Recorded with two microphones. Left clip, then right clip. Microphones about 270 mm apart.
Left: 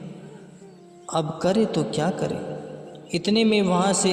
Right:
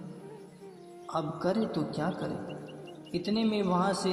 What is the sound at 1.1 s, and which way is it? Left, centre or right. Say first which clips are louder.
A man's voice: left 8 dB; left.